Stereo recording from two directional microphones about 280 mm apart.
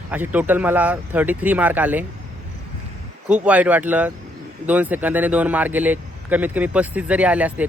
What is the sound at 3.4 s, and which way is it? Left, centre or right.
Speech, centre.